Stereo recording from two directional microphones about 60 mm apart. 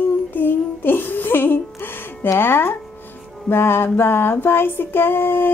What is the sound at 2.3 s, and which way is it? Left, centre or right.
Speech, left.